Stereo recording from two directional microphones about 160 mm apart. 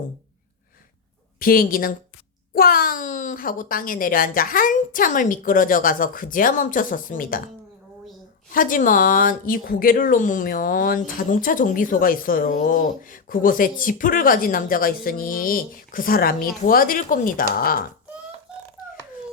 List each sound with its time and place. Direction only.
1.4 s speech: 65° left (ahead or behind)
8.5 s speech: 60° left (ahead or behind)